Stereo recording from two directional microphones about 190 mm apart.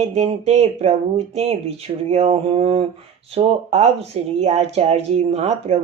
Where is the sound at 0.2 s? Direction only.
35° right (ahead or behind).